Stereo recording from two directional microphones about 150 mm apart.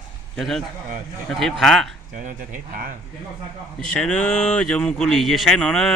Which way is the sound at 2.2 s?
65° right (ahead or behind).